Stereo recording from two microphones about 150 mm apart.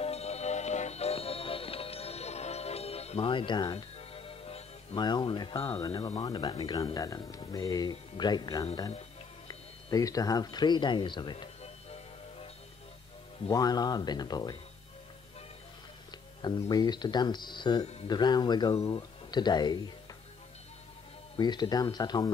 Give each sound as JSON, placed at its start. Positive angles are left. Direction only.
{"t": 0.0, "sound": "music", "side_deg": 45}
{"t": 5.0, "sound": "speech", "side_deg": 30}
{"t": 11.6, "sound": "music", "side_deg": 45}
{"t": 13.5, "sound": "speech", "side_deg": 25}
{"t": 16.1, "sound": "speech", "side_deg": 30}
{"t": 21.4, "sound": "speech", "side_deg": 30}